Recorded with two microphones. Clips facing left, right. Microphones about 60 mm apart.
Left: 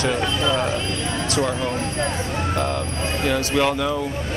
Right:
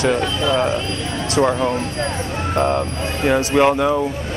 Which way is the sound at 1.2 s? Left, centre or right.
Right.